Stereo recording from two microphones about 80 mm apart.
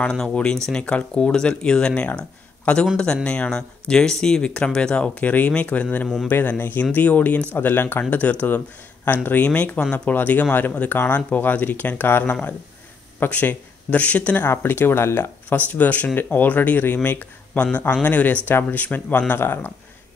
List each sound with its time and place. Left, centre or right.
0.0 s speech: centre; by 19.7 s left